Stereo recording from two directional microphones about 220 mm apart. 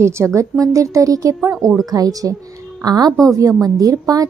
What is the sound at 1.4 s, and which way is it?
Speech, centre (ahead or behind).